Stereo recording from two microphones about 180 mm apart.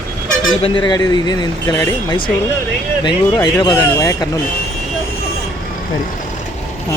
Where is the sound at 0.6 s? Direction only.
25° left (ahead or behind).